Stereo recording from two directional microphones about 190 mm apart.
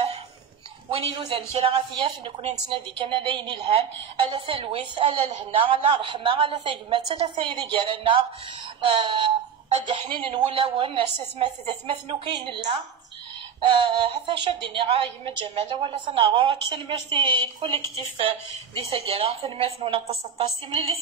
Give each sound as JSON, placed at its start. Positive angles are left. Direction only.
{"t": 1.1, "sound": "a woman's voice", "side_deg": -30}